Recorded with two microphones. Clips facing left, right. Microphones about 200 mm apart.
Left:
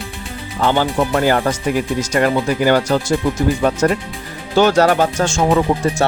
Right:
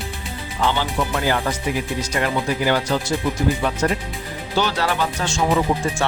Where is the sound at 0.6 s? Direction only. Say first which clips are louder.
Left 6 dB; 50° left (ahead or behind).